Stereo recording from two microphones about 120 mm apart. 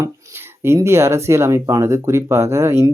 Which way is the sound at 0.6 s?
20° right (ahead or behind).